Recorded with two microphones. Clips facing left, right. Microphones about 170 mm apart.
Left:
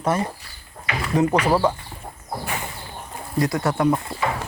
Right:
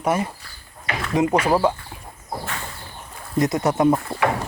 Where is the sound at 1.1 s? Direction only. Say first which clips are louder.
Even; 10° right (ahead or behind).